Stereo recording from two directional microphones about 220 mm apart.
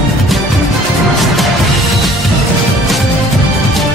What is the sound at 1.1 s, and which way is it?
Music, centre (ahead or behind).